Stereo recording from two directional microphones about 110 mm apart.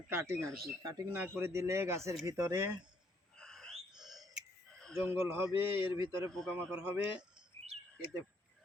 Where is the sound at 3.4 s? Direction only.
5° left (ahead or behind).